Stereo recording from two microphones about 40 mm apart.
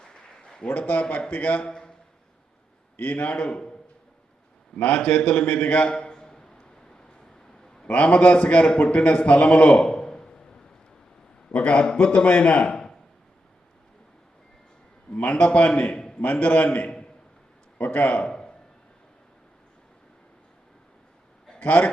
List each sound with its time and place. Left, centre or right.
0.0 s a sound: centre
1.3 s a man's voice: left
1.6 s a man's voice: centre
3.0 s a man's voice: left
4.8 s a man's voice: left
5.9 s a sound: left
7.9 s a man's voice: left
9.6 s a sound: left
11.5 s a man's voice: left
15.1 s a man's voice: left
17.7 s speech: left
18.2 s a sound: left
21.6 s a man's voice: left